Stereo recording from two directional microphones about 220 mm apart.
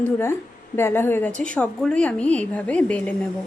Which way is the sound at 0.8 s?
10° left (ahead or behind).